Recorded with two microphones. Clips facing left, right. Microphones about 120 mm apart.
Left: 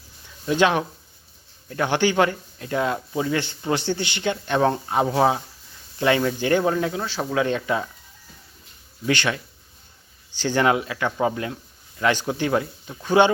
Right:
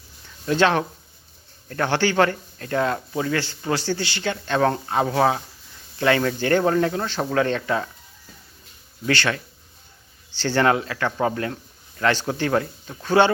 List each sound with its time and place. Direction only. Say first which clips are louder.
0.4 s speech: even; 15° left (ahead or behind)
9.0 s speech: even; 15° left (ahead or behind)
11.5 s a sound: right 1 dB; 10° left (ahead or behind)
12.2 s speech: even; 10° left (ahead or behind)